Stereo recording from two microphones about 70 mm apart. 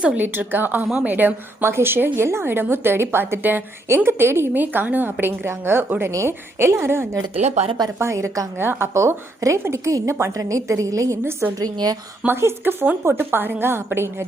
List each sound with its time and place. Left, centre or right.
0.0 s a woman's voice: centre
0.3 s a woman's voice: right
6.1 s a woman's voice: right
11.6 s a woman's voice: right
12.2 s a woman's voice: right